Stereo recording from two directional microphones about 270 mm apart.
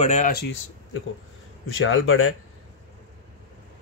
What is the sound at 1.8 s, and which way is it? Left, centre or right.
Speech, left.